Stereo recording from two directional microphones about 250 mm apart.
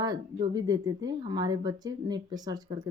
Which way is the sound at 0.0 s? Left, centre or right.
Centre.